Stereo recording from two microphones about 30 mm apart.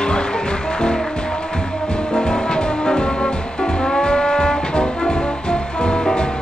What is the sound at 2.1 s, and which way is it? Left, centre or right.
Music, left.